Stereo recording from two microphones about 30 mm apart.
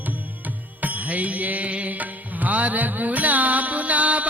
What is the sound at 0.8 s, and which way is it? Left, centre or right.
Music, right.